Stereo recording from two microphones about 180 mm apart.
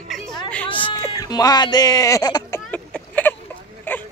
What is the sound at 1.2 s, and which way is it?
Speech, 20° left (ahead or behind).